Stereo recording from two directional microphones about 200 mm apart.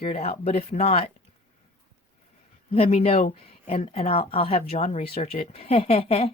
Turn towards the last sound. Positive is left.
turn(degrees=30)  # may be behind; listen again after turning